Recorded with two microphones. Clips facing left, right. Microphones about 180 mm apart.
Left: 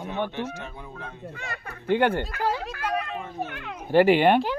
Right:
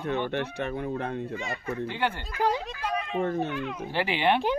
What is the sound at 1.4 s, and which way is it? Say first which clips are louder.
Speech: right 2 dB; 55° left (ahead or behind).